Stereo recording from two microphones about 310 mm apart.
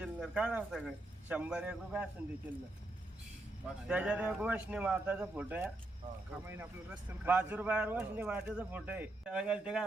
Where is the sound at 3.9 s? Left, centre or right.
Centre.